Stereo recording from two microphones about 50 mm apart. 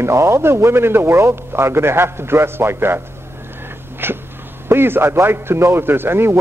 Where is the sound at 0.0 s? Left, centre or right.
Right.